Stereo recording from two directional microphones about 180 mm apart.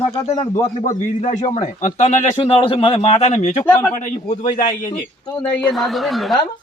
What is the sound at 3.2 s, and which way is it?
Speech, 40° left (ahead or behind).